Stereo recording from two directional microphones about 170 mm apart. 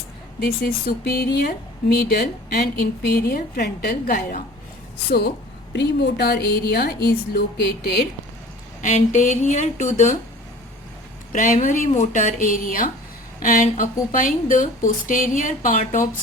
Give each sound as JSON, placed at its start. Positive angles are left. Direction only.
{"t": 0.3, "sound": "a woman's voice", "side_deg": 60}
{"t": 5.7, "sound": "a woman's voice", "side_deg": 85}
{"t": 8.8, "sound": "speech", "side_deg": 45}
{"t": 11.3, "sound": "speech", "side_deg": 50}